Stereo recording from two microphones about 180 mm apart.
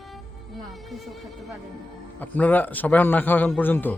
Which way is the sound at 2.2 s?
10° left (ahead or behind).